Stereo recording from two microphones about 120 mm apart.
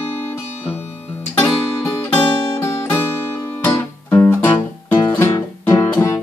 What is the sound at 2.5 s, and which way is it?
Music, 25° left (ahead or behind).